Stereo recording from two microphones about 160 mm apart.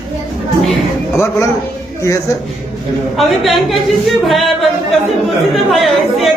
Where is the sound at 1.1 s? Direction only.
20° left (ahead or behind).